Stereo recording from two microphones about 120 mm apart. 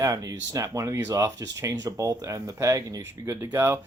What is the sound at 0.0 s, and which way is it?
Speech, 30° right (ahead or behind).